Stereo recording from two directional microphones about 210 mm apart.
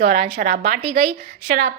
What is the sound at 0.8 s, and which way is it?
Speech, 25° right (ahead or behind).